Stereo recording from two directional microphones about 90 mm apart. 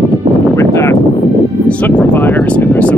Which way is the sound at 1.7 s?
15° left (ahead or behind).